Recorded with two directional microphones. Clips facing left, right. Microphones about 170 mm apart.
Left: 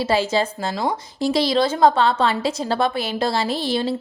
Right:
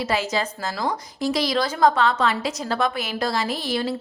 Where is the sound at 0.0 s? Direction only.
30° left (ahead or behind).